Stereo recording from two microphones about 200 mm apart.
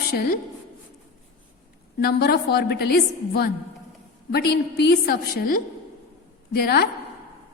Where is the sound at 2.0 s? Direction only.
50° left (ahead or behind).